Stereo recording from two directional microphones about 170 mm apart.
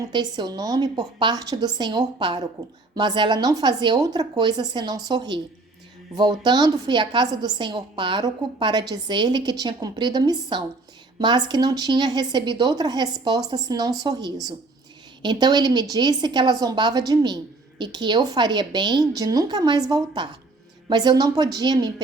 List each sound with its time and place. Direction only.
0.0 s a woman's voice: 25° right (ahead or behind)